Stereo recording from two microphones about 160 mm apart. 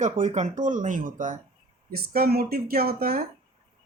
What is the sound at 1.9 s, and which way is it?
Speech, 70° right (ahead or behind).